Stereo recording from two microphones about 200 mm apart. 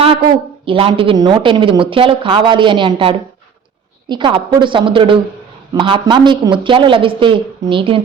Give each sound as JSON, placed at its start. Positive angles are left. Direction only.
{"t": 0.6, "sound": "speech", "side_deg": -25}